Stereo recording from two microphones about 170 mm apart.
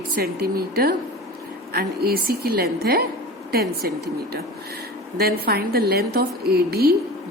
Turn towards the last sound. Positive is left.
turn(degrees=-65)  # may be behind; listen again after turning